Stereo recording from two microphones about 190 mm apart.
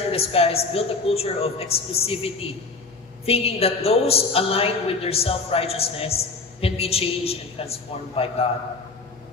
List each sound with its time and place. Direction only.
0.1 s a woman's voice: 30° left (ahead or behind)